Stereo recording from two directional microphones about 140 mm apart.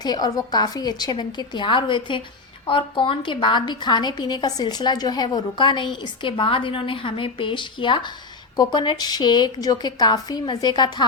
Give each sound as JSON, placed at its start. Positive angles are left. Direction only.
{"t": 0.0, "sound": "a woman's voice", "side_deg": 30}